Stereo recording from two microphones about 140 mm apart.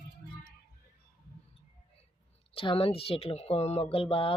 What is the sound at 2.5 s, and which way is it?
Speech, 40° left (ahead or behind).